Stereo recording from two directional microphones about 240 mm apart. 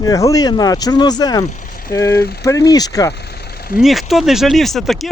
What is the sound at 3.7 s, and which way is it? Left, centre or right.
Speech, centre.